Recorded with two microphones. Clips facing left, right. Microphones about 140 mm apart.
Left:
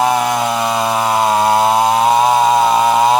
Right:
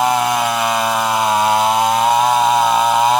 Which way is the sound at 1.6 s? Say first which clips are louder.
Left 2 dB; 35° left (ahead or behind).